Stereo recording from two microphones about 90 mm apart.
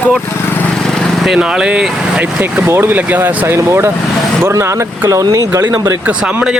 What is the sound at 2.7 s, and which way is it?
Speech, 25° right (ahead or behind).